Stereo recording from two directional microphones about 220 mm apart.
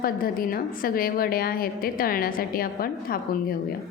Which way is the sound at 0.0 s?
40° left (ahead or behind).